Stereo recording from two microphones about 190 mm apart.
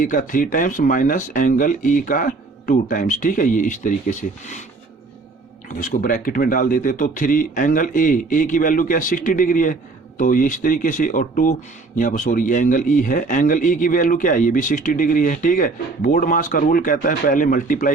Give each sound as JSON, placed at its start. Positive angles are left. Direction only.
{"t": 0.0, "sound": "a man's voice", "side_deg": 45}
{"t": 5.6, "sound": "a man's voice", "side_deg": 45}